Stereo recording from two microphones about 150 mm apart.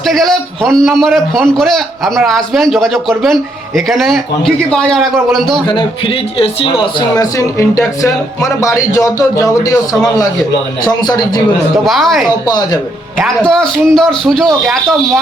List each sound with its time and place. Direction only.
0.1 s a man's voice: centre (ahead or behind)
7.2 s speech: 20° left (ahead or behind)
11.0 s speech: 25° left (ahead or behind)
11.9 s a man's voice: centre (ahead or behind)
12.5 s speech: 25° left (ahead or behind)
13.1 s a man's voice: centre (ahead or behind)